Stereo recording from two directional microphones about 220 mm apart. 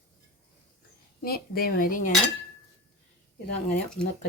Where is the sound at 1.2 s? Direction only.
45° left (ahead or behind).